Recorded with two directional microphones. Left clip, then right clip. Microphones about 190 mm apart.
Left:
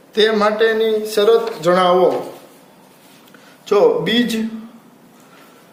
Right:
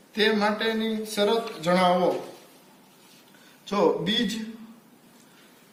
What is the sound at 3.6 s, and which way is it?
Speech, 55° left (ahead or behind).